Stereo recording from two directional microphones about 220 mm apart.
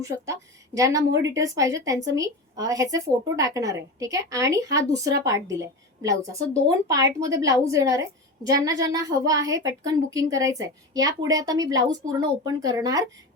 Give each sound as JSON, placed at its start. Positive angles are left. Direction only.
{"t": 0.0, "sound": "a woman's voice", "side_deg": -15}